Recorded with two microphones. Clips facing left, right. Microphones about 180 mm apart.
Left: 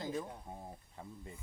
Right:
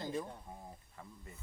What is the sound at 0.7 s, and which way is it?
Speech, 20° left (ahead or behind).